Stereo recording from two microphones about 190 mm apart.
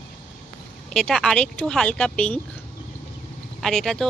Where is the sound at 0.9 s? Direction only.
Centre (ahead or behind).